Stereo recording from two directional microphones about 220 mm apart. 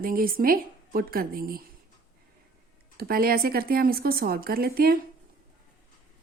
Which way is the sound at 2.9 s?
40° right (ahead or behind).